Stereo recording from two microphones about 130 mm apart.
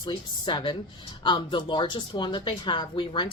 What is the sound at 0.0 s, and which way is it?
Speech, 35° left (ahead or behind).